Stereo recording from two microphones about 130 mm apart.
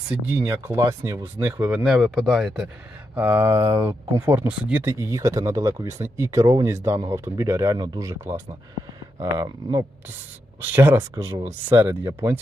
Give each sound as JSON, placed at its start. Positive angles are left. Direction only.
{"t": 0.1, "sound": "speech", "side_deg": -15}
{"t": 1.8, "sound": "speech", "side_deg": -5}
{"t": 3.2, "sound": "speech", "side_deg": -15}
{"t": 4.9, "sound": "speech", "side_deg": -25}
{"t": 10.6, "sound": "speech", "side_deg": -15}